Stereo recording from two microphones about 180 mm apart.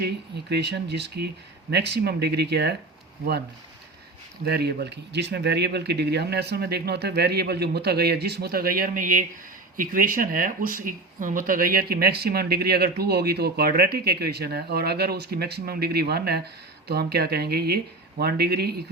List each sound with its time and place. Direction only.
0.5 s speech: 70° right (ahead or behind)
4.4 s speech: 65° right (ahead or behind)